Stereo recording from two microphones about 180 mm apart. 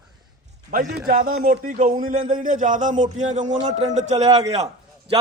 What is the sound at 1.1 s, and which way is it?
A man's voice, 50° right (ahead or behind).